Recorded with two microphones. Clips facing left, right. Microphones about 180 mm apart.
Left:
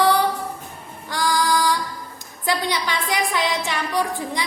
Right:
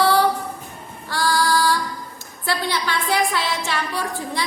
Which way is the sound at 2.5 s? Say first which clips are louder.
Left 1 dB; 15° left (ahead or behind).